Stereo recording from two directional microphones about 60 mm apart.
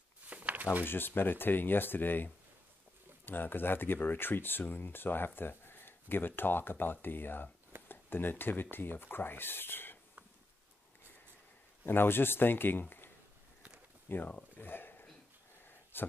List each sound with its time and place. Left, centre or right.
0.3 s a sound: right
0.8 s speech: left
11.8 s speech: left
14.0 s speech: left
14.6 s a sound: left
15.9 s speech: left